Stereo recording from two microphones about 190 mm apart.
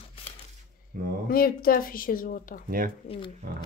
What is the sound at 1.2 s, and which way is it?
Speech, 50° left (ahead or behind).